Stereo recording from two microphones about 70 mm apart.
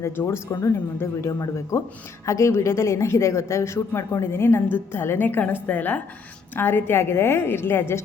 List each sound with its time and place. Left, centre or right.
0.0 s speech: left
1.3 s speech: left
2.2 s a woman's voice: left